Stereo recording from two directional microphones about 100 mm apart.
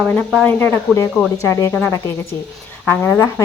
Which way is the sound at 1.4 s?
30° left (ahead or behind).